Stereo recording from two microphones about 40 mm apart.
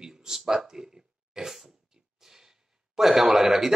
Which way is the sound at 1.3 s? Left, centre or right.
Centre.